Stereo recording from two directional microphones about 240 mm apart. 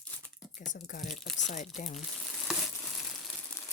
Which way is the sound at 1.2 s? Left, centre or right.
Centre.